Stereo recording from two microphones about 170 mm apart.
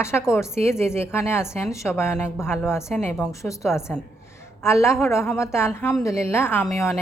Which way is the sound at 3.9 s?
5° left (ahead or behind).